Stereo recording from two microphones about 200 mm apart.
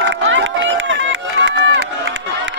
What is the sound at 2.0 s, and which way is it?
Crowd, 65° right (ahead or behind).